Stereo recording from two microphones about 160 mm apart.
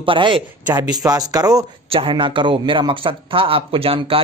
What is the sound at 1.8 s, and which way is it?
A man's voice, 35° right (ahead or behind).